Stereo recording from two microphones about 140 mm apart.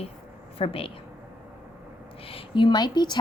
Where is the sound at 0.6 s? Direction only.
40° left (ahead or behind).